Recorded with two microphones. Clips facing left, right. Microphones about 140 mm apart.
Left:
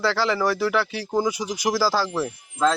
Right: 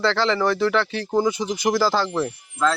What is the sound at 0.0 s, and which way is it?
Speech, 5° left (ahead or behind).